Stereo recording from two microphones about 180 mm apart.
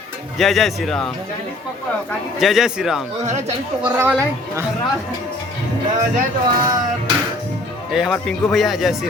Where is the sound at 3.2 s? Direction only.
40° right (ahead or behind).